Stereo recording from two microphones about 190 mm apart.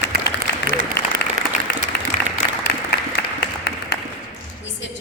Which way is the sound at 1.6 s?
50° left (ahead or behind).